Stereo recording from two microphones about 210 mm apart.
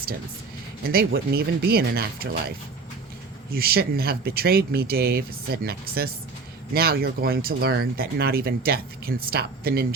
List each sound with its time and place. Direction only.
0.9 s speech: 45° right (ahead or behind)
3.5 s speech: 45° right (ahead or behind)